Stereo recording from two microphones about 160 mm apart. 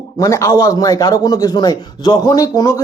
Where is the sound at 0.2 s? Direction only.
20° left (ahead or behind).